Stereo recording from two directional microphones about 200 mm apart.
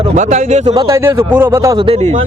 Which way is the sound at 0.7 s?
15° right (ahead or behind).